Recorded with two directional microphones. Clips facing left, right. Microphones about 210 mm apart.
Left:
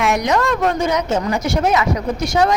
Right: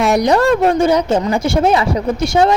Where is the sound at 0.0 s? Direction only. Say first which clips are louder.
Right 5 dB; 35° right (ahead or behind).